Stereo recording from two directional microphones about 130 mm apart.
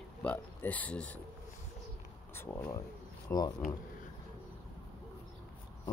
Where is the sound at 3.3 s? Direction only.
20° left (ahead or behind).